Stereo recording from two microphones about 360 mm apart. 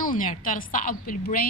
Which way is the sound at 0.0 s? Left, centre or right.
Left.